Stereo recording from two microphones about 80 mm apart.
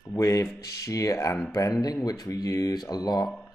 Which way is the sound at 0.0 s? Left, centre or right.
Left.